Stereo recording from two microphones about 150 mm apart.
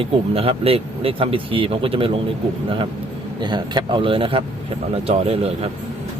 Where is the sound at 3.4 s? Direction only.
30° right (ahead or behind).